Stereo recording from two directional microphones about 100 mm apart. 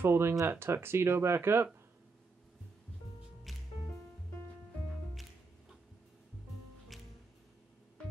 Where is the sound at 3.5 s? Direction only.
Centre (ahead or behind).